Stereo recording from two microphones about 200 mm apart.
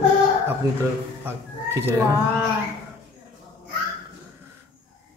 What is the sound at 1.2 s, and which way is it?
Speech, 10° right (ahead or behind).